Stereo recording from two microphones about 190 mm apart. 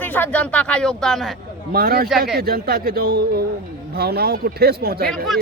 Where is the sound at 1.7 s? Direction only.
55° right (ahead or behind).